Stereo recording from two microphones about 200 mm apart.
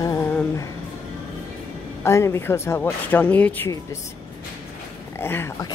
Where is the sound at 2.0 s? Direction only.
15° left (ahead or behind).